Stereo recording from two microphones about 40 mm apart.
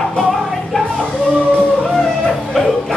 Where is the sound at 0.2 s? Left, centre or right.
Centre.